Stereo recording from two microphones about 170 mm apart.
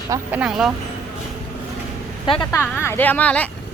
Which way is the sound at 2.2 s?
30° left (ahead or behind).